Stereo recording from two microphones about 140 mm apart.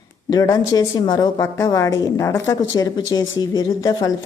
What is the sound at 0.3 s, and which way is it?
A woman's voice, 25° left (ahead or behind).